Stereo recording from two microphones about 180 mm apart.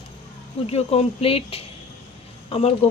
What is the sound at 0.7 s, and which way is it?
Speech, 35° left (ahead or behind).